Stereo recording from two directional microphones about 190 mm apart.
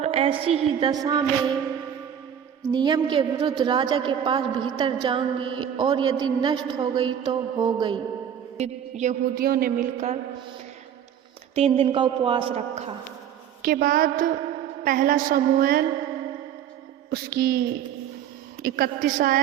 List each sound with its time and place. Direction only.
0.0 s a woman's voice: 30° right (ahead or behind)
2.7 s a woman's voice: 25° right (ahead or behind)
8.5 s a woman's voice: 35° right (ahead or behind)
11.5 s a woman's voice: 30° right (ahead or behind)
13.6 s a woman's voice: 50° right (ahead or behind)
17.1 s a sound: 55° right (ahead or behind)
18.6 s a woman's voice: 50° right (ahead or behind)